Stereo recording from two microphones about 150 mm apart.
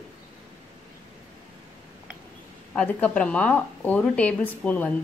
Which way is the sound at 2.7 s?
10° left (ahead or behind).